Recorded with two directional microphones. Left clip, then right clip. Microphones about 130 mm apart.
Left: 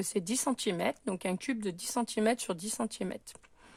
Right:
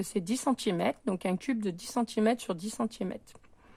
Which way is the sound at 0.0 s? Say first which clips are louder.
Right 1 dB; 25° left (ahead or behind).